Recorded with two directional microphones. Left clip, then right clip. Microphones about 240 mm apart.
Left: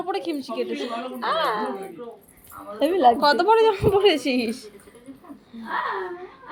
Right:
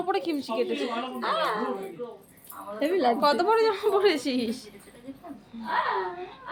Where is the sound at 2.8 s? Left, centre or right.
Centre.